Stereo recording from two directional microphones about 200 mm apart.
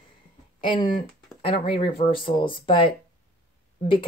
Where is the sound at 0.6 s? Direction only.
25° left (ahead or behind).